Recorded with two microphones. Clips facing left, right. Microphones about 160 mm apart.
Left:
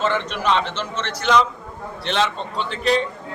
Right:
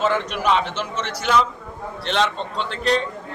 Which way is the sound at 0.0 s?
10° right (ahead or behind).